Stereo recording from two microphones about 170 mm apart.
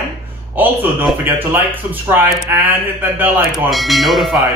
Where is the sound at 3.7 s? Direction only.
Centre (ahead or behind).